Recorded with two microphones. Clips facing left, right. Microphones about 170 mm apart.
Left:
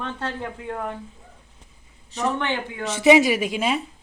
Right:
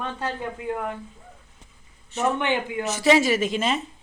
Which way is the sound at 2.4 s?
15° right (ahead or behind).